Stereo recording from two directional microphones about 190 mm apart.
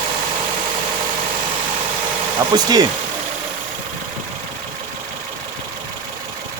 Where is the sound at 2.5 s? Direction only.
20° right (ahead or behind).